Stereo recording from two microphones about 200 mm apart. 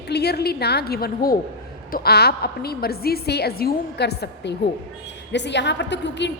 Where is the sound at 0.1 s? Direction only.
55° left (ahead or behind).